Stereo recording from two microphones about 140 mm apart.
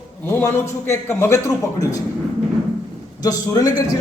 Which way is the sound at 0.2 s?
15° left (ahead or behind).